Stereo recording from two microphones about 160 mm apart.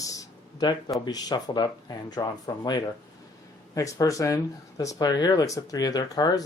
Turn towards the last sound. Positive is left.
turn(degrees=25)  # may be behind; listen again after turning